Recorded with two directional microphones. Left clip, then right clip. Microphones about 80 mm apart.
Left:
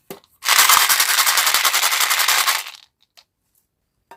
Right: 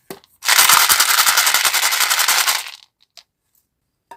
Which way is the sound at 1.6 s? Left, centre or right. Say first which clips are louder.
Right 1 dB; centre.